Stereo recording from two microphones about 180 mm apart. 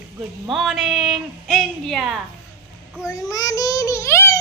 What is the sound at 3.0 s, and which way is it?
A child's voice, 20° left (ahead or behind).